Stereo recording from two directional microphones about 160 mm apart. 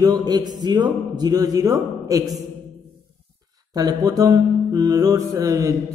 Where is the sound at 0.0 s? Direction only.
25° right (ahead or behind).